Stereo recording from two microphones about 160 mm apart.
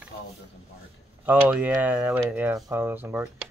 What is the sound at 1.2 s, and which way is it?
Speech, 5° right (ahead or behind).